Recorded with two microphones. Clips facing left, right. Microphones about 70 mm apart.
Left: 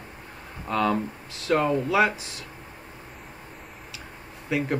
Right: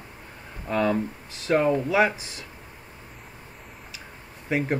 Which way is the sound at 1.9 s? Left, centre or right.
Right.